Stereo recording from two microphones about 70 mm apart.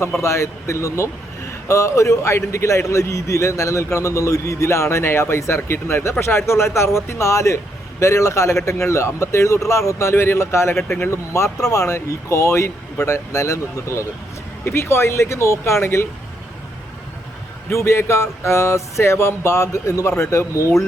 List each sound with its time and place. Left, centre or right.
0.2 s a man's voice: left
17.7 s a man's voice: left